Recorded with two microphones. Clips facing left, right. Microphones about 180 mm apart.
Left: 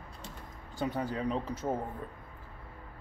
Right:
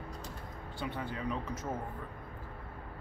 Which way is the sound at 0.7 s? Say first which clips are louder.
Left 6 dB; 40° left (ahead or behind).